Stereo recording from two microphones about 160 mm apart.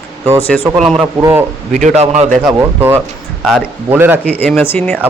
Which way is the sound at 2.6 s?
15° right (ahead or behind).